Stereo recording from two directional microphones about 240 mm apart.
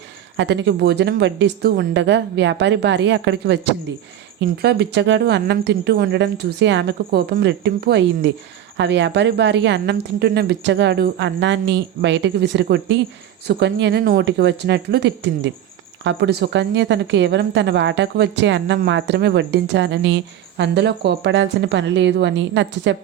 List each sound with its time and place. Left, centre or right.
0.3 s speech: right